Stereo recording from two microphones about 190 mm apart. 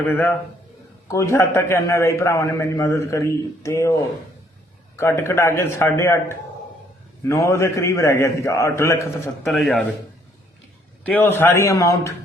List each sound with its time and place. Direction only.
0.1 s a man's voice: 10° left (ahead or behind)
9.4 s speech: centre (ahead or behind)
11.0 s a man's voice: 10° left (ahead or behind)